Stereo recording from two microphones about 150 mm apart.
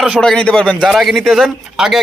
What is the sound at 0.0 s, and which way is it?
Speech, centre (ahead or behind).